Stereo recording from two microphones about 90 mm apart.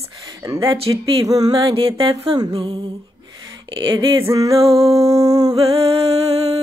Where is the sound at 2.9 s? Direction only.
45° right (ahead or behind); by 4.2 s 65° right (ahead or behind).